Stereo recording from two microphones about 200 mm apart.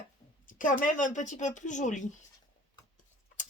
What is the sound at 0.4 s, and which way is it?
Speech, 40° left (ahead or behind).